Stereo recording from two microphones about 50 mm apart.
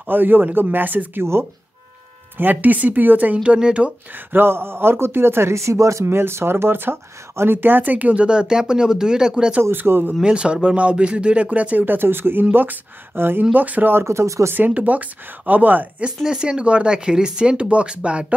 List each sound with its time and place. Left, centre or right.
0.0 s speech: right
2.3 s speech: right
3.4 s speech: right
4.3 s speech: right
6.0 s speech: right; by 9.6 s centre
9.6 s speech: right
10.2 s speech: right
11.8 s speech: right
13.4 s speech: right
13.9 s speech: right
14.7 s speech: right
16.3 s speech: centre